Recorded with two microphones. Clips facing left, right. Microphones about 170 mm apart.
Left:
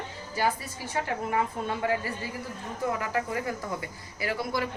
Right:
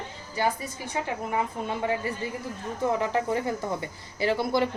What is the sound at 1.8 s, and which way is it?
Speech, 20° right (ahead or behind).